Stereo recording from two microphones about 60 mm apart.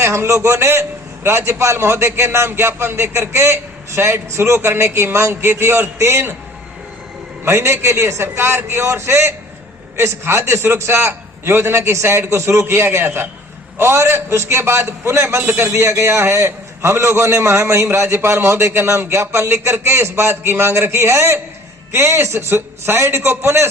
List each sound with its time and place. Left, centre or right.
0.0 s a man's voice: right
7.4 s a man's voice: right